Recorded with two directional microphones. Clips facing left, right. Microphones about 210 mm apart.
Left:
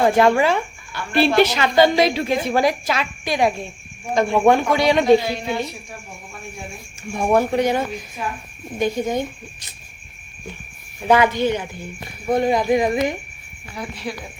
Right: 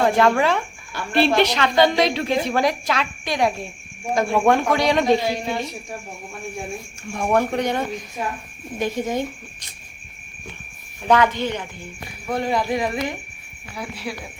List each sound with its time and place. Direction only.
0.0 s a woman's voice: 5° left (ahead or behind)
7.1 s a woman's voice: 10° left (ahead or behind)
11.1 s speech: 10° left (ahead or behind)
13.7 s a woman's voice: 5° right (ahead or behind)